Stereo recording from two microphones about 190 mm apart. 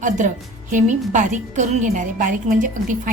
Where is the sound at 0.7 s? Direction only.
40° right (ahead or behind).